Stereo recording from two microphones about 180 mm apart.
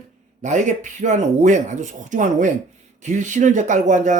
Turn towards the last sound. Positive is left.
turn(degrees=-45)  # may be behind; listen again after turning